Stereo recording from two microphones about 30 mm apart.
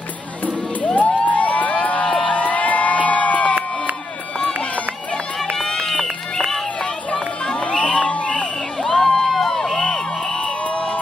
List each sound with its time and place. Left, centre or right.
0.8 s a sound: left
2.2 s crowd: left
5.7 s run: centre
7.6 s crowd: left
8.8 s a sound: centre
10.4 s crowd: left